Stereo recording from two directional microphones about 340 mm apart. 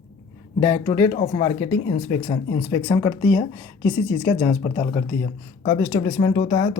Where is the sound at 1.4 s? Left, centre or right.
Centre.